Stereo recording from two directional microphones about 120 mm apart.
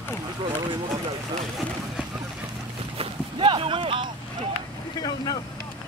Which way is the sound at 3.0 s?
45° right (ahead or behind).